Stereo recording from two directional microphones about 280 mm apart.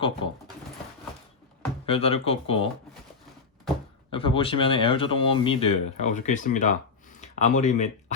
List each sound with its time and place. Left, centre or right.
1.9 s speech: left
4.1 s speech: centre